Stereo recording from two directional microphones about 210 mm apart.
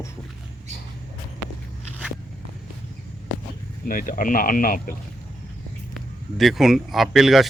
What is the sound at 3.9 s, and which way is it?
Speech, 40° left (ahead or behind).